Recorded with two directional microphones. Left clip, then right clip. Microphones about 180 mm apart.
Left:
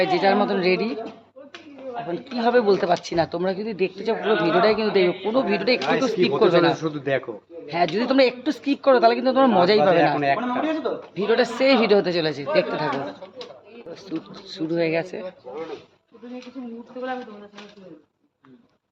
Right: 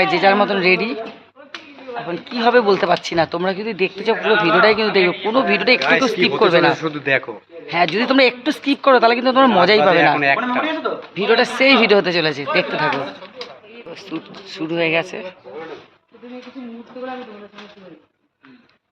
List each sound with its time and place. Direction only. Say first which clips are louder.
0.0 s speech: right 5 dB; 20° right (ahead or behind)
2.0 s speech: right 6 dB; 20° right (ahead or behind)
6.7 s speech: right 6 dB; 10° left (ahead or behind)
7.9 s speech: right 3 dB; 20° right (ahead or behind)
10.2 s a man's voice: right 5 dB; 20° left (ahead or behind)
11.1 s speech: right 5 dB; 20° right (ahead or behind)
13.9 s speech: right 3 dB; 10° left (ahead or behind)